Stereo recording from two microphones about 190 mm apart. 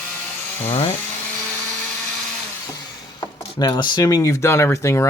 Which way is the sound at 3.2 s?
25° left (ahead or behind).